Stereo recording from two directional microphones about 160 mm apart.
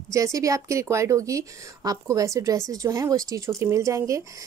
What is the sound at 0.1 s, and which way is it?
A woman's voice, 20° right (ahead or behind).